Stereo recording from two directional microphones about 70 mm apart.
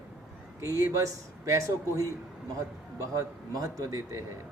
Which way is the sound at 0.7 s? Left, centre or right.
Right.